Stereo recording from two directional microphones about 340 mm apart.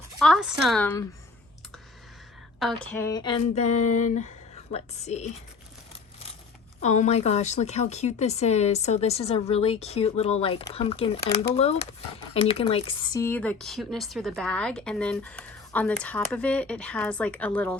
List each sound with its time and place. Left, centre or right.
0.2 s speech: centre
2.8 s speech: centre
6.8 s speech: left; by 17.7 s centre